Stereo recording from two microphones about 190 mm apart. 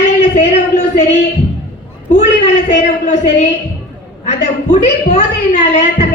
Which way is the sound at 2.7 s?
40° left (ahead or behind).